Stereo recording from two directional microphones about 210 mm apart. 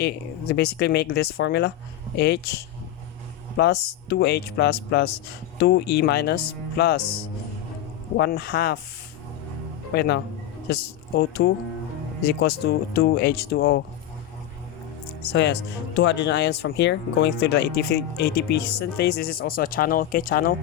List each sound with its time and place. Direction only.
0.0 s speech: 50° left (ahead or behind)
3.6 s speech: 50° left (ahead or behind)
9.9 s speech: 50° left (ahead or behind)
15.3 s speech: 55° left (ahead or behind)